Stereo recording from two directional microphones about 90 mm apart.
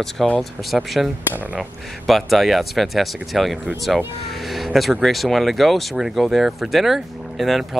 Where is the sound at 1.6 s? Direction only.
Centre (ahead or behind).